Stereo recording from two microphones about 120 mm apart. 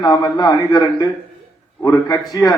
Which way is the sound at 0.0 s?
35° left (ahead or behind).